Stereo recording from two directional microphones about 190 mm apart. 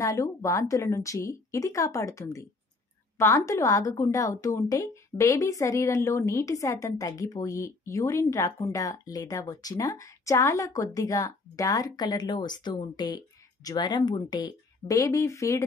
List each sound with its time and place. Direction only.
0.0 s speech: 15° left (ahead or behind)